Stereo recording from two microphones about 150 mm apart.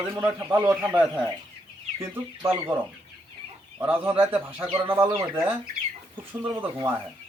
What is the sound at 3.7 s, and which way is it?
Speech, 15° right (ahead or behind).